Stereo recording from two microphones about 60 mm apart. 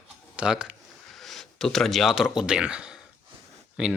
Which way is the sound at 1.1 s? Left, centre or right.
Centre.